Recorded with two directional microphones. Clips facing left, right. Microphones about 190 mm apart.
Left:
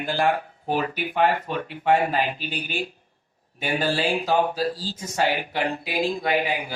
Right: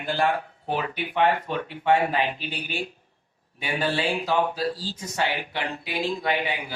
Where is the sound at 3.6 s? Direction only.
45° left (ahead or behind).